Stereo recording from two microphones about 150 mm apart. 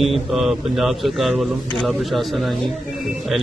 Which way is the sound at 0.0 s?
Centre (ahead or behind).